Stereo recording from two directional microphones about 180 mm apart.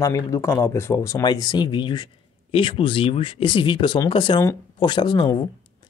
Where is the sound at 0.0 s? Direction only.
15° left (ahead or behind).